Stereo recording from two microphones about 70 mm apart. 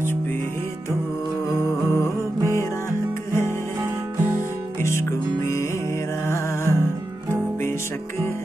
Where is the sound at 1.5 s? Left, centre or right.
Left.